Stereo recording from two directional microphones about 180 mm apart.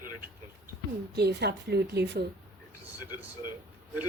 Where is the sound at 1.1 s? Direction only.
65° right (ahead or behind).